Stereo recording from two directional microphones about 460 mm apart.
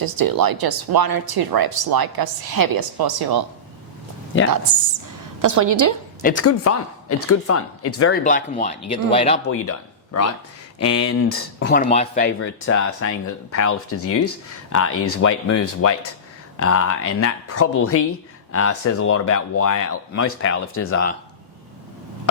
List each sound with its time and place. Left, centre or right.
0.0 s speech: right
5.4 s a woman's voice: right
6.2 s speech: left
8.2 s speech: centre
9.5 s speech: left